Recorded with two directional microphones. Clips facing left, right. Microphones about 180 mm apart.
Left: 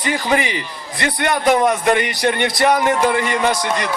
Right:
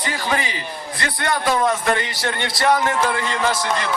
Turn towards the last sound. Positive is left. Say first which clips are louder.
# left 3 dB
turn(degrees=20)  # may be behind; listen again after turning